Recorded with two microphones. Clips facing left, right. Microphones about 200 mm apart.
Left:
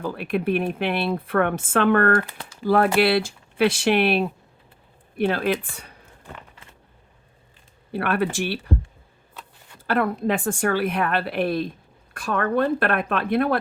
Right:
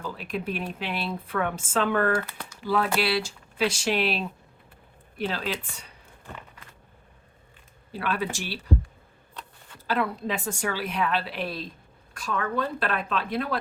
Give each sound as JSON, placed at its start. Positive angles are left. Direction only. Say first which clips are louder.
{"t": 0.0, "sound": "speech", "louder": "left 7 dB", "side_deg": 60}
{"t": 7.9, "sound": "speech", "louder": "left 6 dB", "side_deg": 60}
{"t": 9.8, "sound": "speech", "louder": "left 5 dB", "side_deg": 55}